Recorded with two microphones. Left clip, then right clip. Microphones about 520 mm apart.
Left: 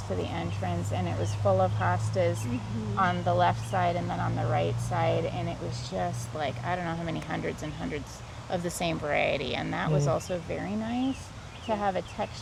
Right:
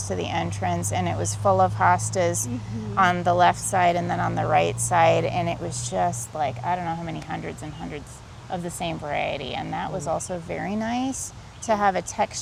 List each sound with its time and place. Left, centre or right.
0.2 s a woman's voice: right
6.0 s speech: centre
10.5 s a woman's voice: right